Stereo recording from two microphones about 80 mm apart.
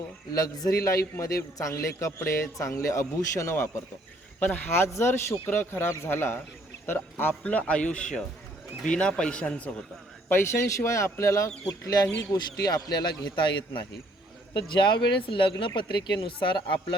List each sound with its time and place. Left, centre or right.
0.3 s a man's voice: left
0.8 s a man's voice: left
4.4 s speech: left
10.2 s a man's voice: left
13.3 s speech: left
14.5 s speech: left